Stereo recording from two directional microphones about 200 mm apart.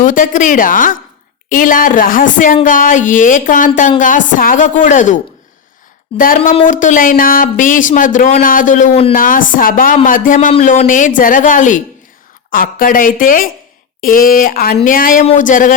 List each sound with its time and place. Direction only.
0.0 s speech: 40° left (ahead or behind)